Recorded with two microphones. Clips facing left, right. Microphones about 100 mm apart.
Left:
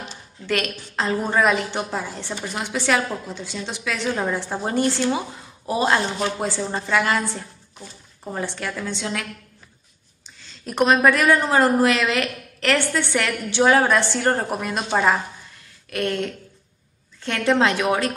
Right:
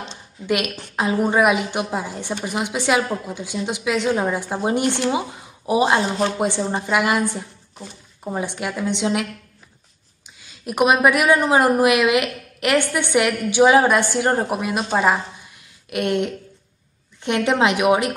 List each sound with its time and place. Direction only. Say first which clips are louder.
0.9 s a woman's voice: right 3 dB; 10° right (ahead or behind)